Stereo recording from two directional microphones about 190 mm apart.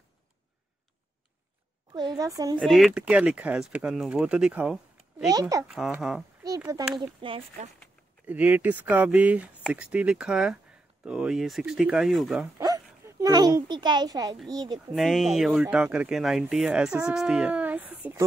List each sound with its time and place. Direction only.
1.9 s speech: 20° right (ahead or behind)
2.6 s speech: centre (ahead or behind)
5.2 s speech: 20° right (ahead or behind)
5.7 s speech: centre (ahead or behind)
7.0 s speech: 25° right (ahead or behind)
8.3 s speech: 10° right (ahead or behind)
12.5 s a child's voice: 15° right (ahead or behind)
15.0 s speech: centre (ahead or behind)